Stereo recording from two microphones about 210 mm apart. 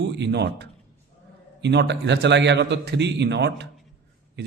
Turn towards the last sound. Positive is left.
turn(degrees=-55)  # may be behind; listen again after turning